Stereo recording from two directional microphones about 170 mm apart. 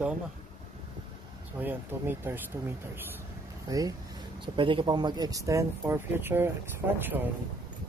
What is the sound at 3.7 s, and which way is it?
Speech, 20° right (ahead or behind).